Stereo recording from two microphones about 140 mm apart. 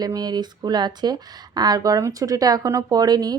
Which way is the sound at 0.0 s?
30° right (ahead or behind).